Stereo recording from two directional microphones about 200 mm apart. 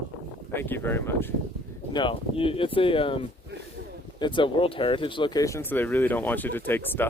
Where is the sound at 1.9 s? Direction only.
25° left (ahead or behind).